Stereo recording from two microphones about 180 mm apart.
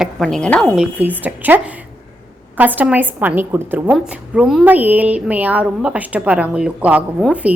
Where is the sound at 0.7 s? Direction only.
5° right (ahead or behind).